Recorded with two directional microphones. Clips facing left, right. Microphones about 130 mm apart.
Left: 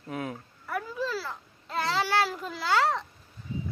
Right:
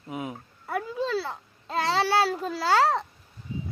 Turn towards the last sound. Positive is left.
turn(degrees=-35)  # may be behind; listen again after turning